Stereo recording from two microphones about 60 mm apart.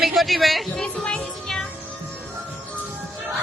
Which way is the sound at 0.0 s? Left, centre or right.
Centre.